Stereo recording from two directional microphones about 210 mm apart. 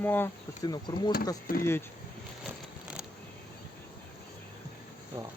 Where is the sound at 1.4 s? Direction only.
45° left (ahead or behind).